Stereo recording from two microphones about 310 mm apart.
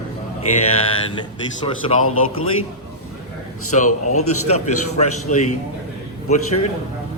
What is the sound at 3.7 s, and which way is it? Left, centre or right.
Speech, left.